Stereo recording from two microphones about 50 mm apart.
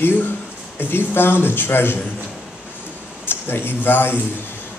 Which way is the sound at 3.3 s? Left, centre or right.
Left.